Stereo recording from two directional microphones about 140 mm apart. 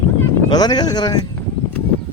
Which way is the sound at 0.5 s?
30° left (ahead or behind).